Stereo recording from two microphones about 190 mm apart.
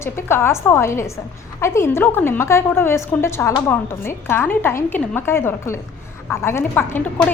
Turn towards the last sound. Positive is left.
turn(degrees=10)  # may be behind; listen again after turning